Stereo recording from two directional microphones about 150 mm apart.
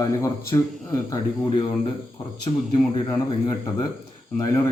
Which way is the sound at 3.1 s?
25° left (ahead or behind).